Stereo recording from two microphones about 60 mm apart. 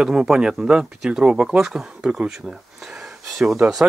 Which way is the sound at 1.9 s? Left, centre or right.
Centre.